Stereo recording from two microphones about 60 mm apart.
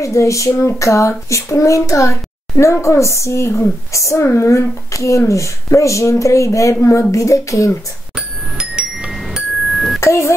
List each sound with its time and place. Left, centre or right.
0.0 s speech: left
6.8 s a woman's voice: left
7.1 s speech: left
8.5 s music: centre
9.9 s speech: left